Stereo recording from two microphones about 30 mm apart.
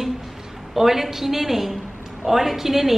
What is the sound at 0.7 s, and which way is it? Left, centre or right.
A woman's voice, centre.